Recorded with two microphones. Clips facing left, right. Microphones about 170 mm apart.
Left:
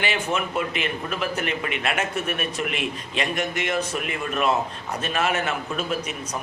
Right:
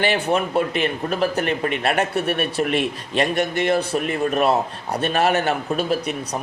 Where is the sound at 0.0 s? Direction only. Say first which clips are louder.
Right 6 dB; 35° right (ahead or behind).